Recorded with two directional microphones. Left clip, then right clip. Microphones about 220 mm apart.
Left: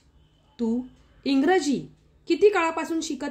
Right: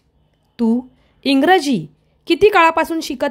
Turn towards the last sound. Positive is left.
turn(degrees=-40)  # may be behind; listen again after turning